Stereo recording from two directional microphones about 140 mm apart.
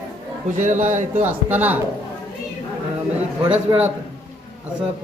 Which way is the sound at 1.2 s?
10° right (ahead or behind).